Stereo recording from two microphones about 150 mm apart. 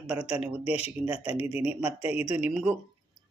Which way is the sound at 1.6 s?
10° right (ahead or behind).